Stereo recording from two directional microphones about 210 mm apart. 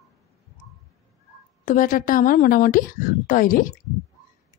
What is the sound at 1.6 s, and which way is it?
Speech, 40° left (ahead or behind).